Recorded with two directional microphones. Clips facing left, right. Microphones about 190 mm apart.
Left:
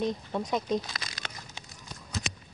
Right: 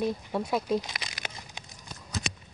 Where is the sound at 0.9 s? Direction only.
15° right (ahead or behind).